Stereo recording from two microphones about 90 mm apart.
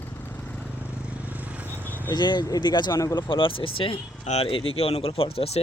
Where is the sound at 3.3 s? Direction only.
75° left (ahead or behind).